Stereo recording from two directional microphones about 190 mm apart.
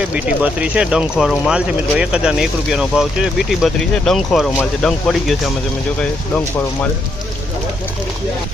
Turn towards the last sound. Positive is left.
turn(degrees=10)  # may be behind; listen again after turning